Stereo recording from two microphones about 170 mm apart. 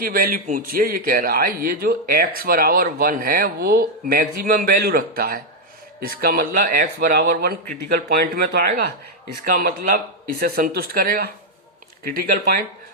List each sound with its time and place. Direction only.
0.0 s speech: 60° right (ahead or behind)